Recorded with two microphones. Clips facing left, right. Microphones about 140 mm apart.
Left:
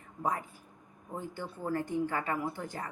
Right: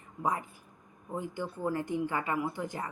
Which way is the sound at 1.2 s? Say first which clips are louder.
Right 4 dB; 15° right (ahead or behind).